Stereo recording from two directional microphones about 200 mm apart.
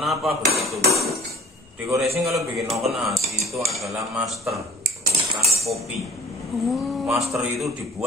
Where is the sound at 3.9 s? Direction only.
Centre (ahead or behind).